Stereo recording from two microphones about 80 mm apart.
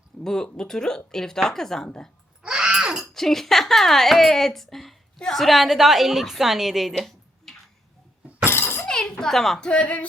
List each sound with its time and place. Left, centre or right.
0.3 s speech: centre
2.4 s groan: centre
3.1 s speech: centre
8.4 s a sound: left
8.9 s a child's voice: centre